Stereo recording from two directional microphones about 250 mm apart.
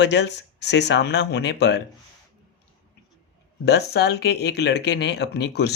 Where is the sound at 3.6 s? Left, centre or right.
Left.